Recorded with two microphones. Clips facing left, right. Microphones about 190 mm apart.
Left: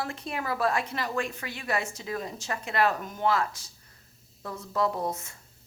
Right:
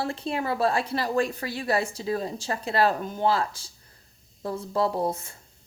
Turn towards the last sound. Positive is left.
turn(degrees=-30)  # may be behind; listen again after turning